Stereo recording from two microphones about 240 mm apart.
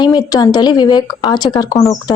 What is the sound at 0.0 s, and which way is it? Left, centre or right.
A woman's voice, centre.